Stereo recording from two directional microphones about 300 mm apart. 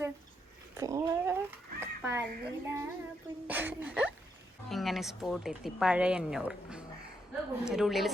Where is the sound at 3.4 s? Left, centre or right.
Centre.